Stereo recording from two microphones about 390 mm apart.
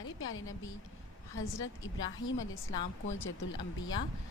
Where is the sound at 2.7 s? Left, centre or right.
Centre.